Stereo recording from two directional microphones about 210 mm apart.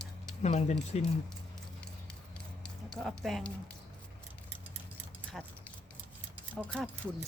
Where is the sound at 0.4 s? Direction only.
30° left (ahead or behind).